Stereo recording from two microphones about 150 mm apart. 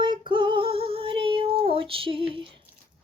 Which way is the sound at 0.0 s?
30° right (ahead or behind).